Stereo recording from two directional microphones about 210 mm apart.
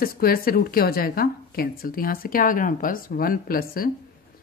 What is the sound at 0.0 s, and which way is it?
A woman's voice, 45° left (ahead or behind).